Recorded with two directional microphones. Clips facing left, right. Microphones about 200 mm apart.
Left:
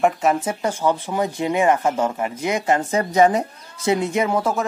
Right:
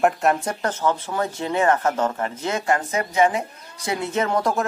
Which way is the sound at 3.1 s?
40° left (ahead or behind).